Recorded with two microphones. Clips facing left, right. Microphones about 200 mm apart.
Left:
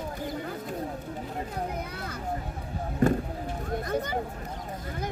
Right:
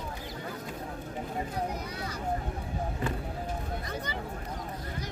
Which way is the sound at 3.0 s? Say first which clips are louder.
Left 8 dB; 45° left (ahead or behind).